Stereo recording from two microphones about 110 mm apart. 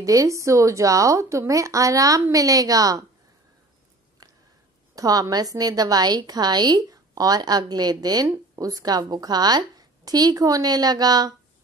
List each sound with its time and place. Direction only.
0.0 s a woman's voice: 30° right (ahead or behind)
4.2 s a sound: 35° right (ahead or behind)
4.9 s a woman's voice: 30° right (ahead or behind)